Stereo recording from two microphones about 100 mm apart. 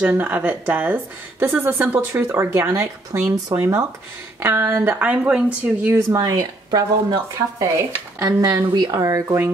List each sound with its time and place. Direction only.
0.0 s speech: 20° right (ahead or behind)
5.9 s speech: 25° right (ahead or behind)